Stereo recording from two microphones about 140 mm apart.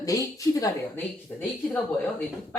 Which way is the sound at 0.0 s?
25° left (ahead or behind).